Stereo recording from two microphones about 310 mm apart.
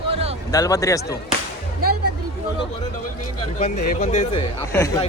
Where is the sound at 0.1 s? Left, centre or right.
Centre.